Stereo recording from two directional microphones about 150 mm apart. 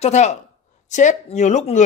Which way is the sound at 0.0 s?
50° left (ahead or behind).